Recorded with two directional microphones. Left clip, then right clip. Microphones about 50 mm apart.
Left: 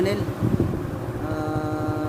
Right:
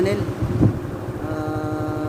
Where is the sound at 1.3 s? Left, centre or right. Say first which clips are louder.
Right 1 dB; left.